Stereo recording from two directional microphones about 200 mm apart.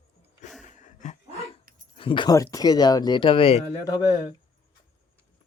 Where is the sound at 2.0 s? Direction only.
25° left (ahead or behind).